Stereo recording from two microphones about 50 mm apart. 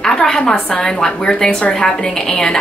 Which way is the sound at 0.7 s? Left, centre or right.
Centre.